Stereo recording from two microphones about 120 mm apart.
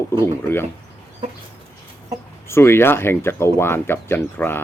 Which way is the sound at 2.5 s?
20° left (ahead or behind).